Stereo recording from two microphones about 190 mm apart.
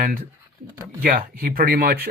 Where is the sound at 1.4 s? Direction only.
50° right (ahead or behind).